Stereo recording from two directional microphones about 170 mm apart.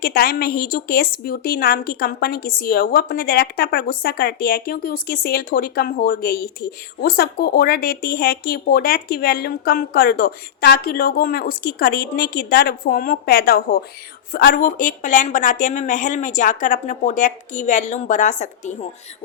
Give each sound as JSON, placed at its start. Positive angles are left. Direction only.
{"t": 0.0, "sound": "a woman's voice", "side_deg": 65}